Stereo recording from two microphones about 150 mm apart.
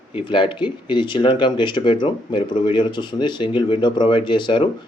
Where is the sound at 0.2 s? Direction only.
35° left (ahead or behind).